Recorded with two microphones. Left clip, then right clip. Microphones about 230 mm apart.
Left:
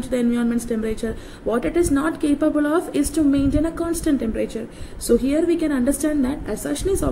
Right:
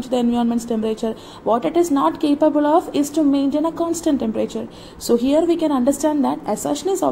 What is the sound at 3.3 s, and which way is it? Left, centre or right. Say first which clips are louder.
Speech: right 1 dB; centre.